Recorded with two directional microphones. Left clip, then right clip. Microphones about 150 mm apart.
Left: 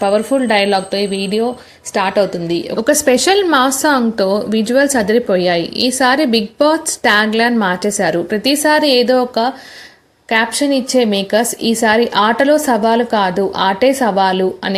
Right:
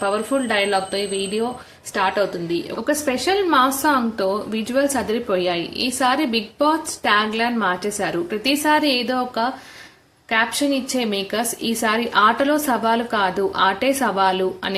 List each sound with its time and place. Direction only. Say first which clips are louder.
0.0 s a woman's voice: left 7 dB; 40° left (ahead or behind)